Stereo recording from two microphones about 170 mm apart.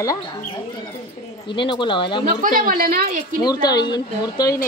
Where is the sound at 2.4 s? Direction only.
55° right (ahead or behind).